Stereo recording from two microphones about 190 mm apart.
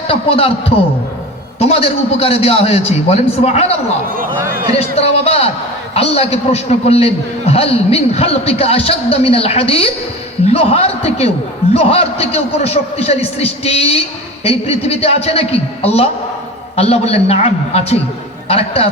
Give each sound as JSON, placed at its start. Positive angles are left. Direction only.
{"t": 0.1, "sound": "a man's voice", "side_deg": 30}
{"t": 1.5, "sound": "a man's voice", "side_deg": 30}
{"t": 4.8, "sound": "a man's voice", "side_deg": 35}